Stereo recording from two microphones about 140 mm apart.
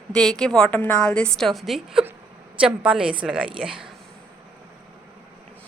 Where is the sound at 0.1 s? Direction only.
5° left (ahead or behind).